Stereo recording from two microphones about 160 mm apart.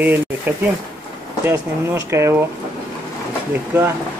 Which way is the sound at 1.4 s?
15° right (ahead or behind).